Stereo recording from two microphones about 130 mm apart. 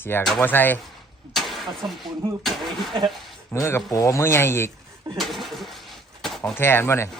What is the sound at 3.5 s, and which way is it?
Speech, 20° left (ahead or behind).